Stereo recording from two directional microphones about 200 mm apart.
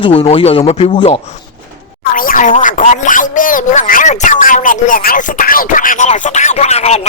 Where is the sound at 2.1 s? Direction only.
45° left (ahead or behind).